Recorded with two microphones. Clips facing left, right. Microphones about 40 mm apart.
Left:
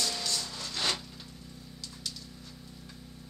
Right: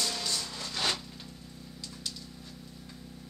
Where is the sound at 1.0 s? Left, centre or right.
Centre.